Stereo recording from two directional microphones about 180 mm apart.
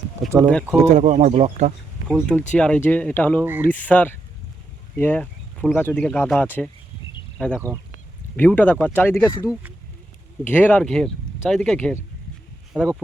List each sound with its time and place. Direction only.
0.2 s speech: centre (ahead or behind)
0.9 s speech: 40° right (ahead or behind)
2.0 s speech: 5° right (ahead or behind)
2.5 s speech: 5° left (ahead or behind)